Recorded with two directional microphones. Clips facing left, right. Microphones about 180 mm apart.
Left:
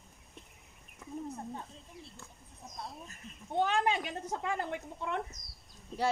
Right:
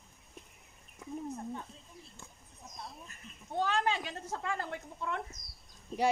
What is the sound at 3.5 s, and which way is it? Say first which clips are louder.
A woman's voice: left 2 dB; 20° left (ahead or behind).